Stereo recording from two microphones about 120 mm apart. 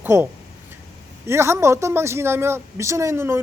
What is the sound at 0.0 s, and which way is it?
Speech, 20° right (ahead or behind).